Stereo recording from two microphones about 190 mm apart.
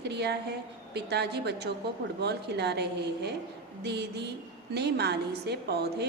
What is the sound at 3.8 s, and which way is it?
A woman's voice, 60° right (ahead or behind).